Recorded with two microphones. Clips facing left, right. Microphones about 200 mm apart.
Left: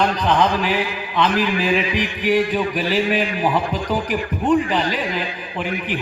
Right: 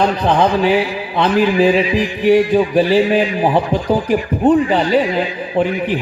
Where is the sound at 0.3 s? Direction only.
30° right (ahead or behind).